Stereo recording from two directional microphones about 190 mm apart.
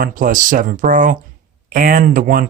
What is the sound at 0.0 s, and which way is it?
Speech, 45° right (ahead or behind).